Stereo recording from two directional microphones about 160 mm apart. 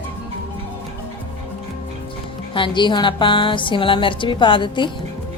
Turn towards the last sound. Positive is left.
turn(degrees=30)  # may be behind; listen again after turning